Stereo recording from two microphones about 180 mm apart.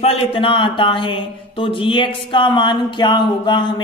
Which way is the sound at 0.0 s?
35° left (ahead or behind).